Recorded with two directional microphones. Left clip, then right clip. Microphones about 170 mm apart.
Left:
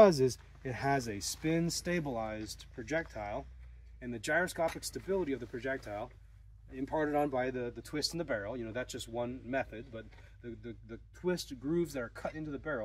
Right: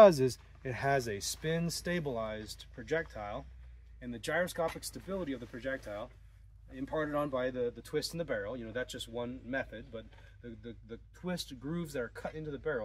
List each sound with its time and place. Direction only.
0.0 s speech: 35° right (ahead or behind); by 12.8 s 20° right (ahead or behind)